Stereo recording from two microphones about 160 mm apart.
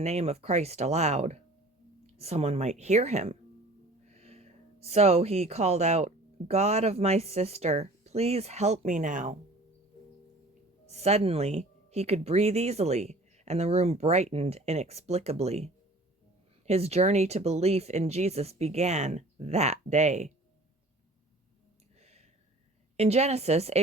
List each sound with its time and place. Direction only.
0.0 s speech: 40° right (ahead or behind)
10.8 s speech: 40° right (ahead or behind)
23.0 s speech: 40° right (ahead or behind)